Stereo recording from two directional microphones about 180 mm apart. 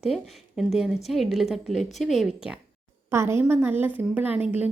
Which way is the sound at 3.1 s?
15° right (ahead or behind).